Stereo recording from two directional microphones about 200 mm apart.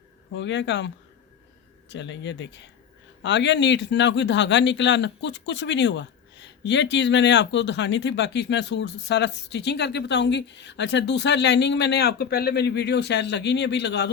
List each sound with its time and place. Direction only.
0.3 s a man's voice: 60° left (ahead or behind)
1.9 s a man's voice: 65° left (ahead or behind)